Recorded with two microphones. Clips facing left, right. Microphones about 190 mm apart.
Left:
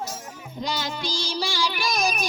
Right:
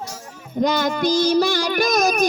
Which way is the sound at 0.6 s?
55° right (ahead or behind).